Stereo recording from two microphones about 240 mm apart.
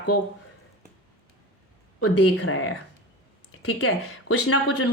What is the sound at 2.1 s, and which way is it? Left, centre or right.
Speech, left.